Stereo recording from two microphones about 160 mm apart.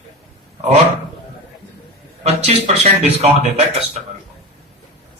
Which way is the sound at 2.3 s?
40° right (ahead or behind).